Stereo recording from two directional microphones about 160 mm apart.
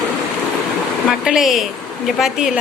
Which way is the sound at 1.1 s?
5° right (ahead or behind).